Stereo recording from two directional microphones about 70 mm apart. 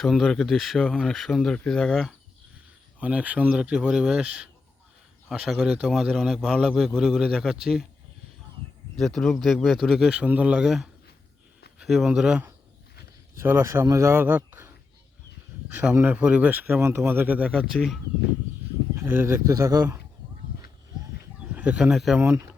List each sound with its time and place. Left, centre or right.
0.0 s speech: centre
3.0 s a man's voice: centre
9.0 s speech: centre
11.8 s a man's voice: centre
13.3 s speech: right
15.7 s speech: right
17.5 s speech: centre
19.2 s speech: right
21.5 s bird: right
21.8 s a man's voice: centre